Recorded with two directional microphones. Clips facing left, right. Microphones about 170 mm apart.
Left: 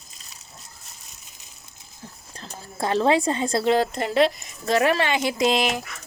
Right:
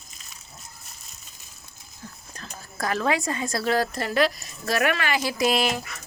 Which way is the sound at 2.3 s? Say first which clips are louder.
Left 2 dB; 30° left (ahead or behind).